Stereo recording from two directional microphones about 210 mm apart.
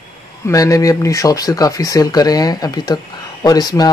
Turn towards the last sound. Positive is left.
turn(degrees=20)  # may be behind; listen again after turning